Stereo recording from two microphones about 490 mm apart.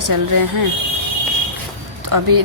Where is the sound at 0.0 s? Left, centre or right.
Right.